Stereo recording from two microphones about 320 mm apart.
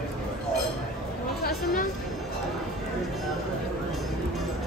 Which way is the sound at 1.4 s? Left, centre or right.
Left.